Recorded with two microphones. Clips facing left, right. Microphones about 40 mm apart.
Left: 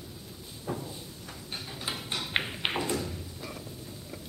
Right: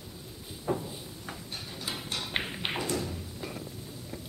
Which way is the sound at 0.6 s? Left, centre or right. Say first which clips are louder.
Right 4 dB; centre.